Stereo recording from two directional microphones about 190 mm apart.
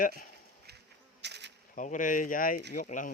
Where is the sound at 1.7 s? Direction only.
40° left (ahead or behind).